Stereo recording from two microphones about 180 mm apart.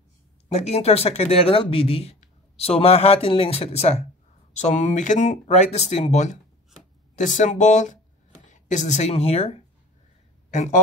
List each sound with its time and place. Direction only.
0.5 s speech: 40° left (ahead or behind)